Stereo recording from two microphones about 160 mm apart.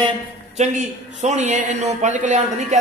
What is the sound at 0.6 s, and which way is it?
A man's voice, 45° right (ahead or behind).